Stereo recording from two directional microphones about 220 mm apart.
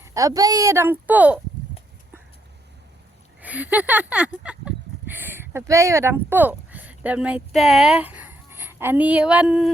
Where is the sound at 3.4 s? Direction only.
5° right (ahead or behind).